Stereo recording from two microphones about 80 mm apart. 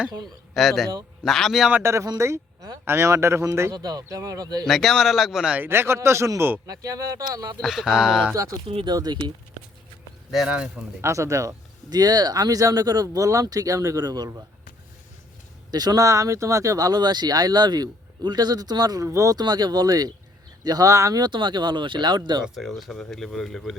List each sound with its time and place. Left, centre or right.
0.5 s speech: centre
1.8 s speech: right
3.8 s speech: right
4.6 s speech: centre
5.5 s speech: right
7.3 s speech: right
7.6 s speech: centre
9.0 s speech: right
11.0 s speech: right
11.9 s speech: right
15.7 s speech: right
19.0 s speech: right
19.4 s speech: right
22.5 s speech: centre